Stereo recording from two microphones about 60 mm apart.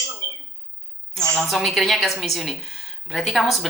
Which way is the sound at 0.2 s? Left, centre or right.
Right.